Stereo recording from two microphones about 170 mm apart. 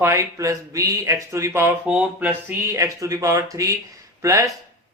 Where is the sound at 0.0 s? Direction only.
15° right (ahead or behind).